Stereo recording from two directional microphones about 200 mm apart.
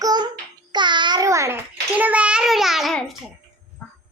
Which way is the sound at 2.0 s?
5° right (ahead or behind).